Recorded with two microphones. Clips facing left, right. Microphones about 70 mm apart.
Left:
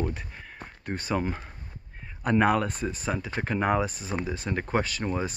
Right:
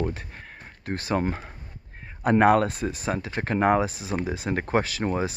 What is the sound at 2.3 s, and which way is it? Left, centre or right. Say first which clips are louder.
Speech: right 4 dB; right.